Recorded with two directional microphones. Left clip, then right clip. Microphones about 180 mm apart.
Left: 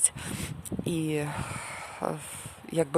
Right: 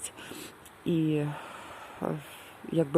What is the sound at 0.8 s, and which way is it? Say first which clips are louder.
Speech: right 2 dB; 15° left (ahead or behind).